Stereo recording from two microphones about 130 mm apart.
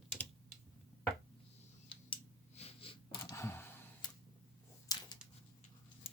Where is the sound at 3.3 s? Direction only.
20° left (ahead or behind).